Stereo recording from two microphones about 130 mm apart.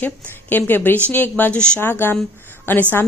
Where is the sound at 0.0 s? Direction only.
15° left (ahead or behind).